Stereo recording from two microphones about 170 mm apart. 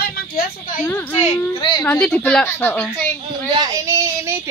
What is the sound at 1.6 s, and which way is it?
Speech, 25° left (ahead or behind).